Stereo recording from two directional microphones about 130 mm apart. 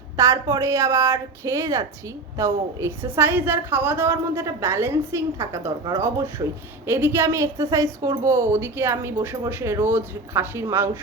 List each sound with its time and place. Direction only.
0.2 s a woman's voice: 25° right (ahead or behind)